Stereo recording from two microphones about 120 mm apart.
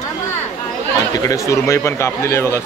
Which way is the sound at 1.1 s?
30° left (ahead or behind).